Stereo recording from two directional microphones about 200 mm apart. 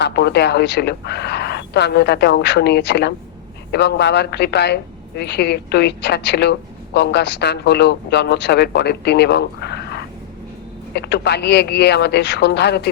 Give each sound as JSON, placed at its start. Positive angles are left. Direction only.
{"t": 0.0, "sound": "a woman's voice", "side_deg": 55}